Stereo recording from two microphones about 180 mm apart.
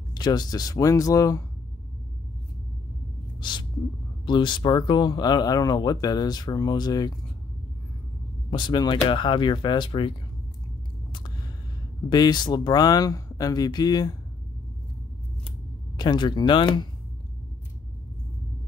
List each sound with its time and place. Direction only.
0.1 s speech: 20° left (ahead or behind)
3.3 s speech: 25° left (ahead or behind)
8.5 s speech: 25° left (ahead or behind)
11.1 s a sound: 25° left (ahead or behind)
12.1 s speech: 25° left (ahead or behind)
16.0 s speech: 25° left (ahead or behind)